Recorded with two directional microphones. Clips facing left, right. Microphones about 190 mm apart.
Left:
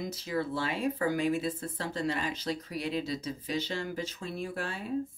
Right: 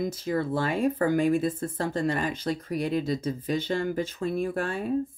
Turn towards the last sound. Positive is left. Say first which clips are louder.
# right 7 dB
turn(degrees=-50)  # may be behind; listen again after turning